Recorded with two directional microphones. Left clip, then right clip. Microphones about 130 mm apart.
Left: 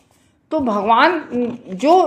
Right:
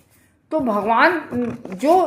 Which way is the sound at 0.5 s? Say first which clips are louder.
Left 3 dB; 35° left (ahead or behind).